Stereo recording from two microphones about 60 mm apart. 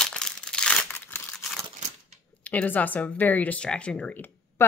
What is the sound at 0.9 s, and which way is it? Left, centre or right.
Crumpling, left.